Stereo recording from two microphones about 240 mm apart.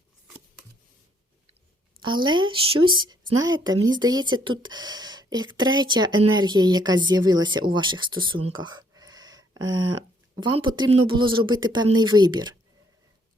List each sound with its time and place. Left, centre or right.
2.0 s speech: centre